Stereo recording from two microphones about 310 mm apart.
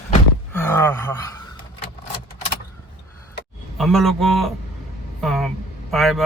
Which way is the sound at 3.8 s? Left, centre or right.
Centre.